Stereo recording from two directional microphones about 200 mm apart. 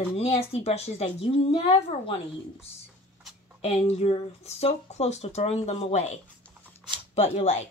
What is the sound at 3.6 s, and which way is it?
Speech, 30° left (ahead or behind).